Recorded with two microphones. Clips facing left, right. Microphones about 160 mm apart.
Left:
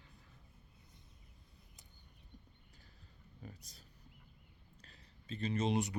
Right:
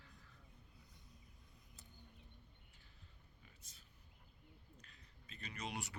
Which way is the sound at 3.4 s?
40° left (ahead or behind).